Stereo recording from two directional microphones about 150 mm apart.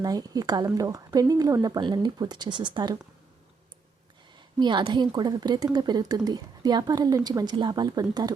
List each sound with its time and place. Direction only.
0.0 s speech: 25° right (ahead or behind)
4.4 s speech: 30° right (ahead or behind)